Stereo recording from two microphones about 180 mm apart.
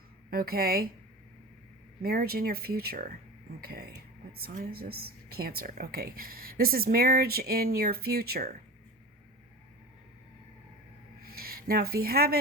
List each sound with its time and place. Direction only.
0.3 s speech: 55° right (ahead or behind)
2.0 s speech: 55° right (ahead or behind)
11.2 s a sound: 55° right (ahead or behind)